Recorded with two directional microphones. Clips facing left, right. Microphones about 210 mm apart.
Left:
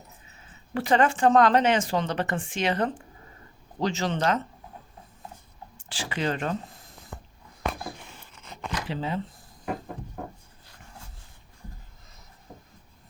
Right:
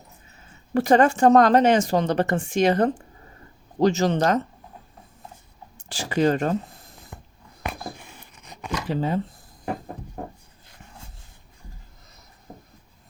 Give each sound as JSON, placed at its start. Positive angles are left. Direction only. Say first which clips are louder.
{"t": 0.7, "sound": "speech", "louder": "right 5 dB", "side_deg": -45}
{"t": 5.9, "sound": "speech", "louder": "right 8 dB", "side_deg": -40}
{"t": 8.4, "sound": "a sound", "louder": "left 1 dB", "side_deg": -15}
{"t": 8.9, "sound": "speech", "louder": "right 7 dB", "side_deg": -45}